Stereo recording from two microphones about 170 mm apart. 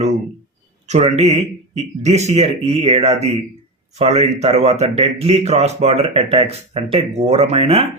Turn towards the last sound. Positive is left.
turn(degrees=-35)  # may be behind; listen again after turning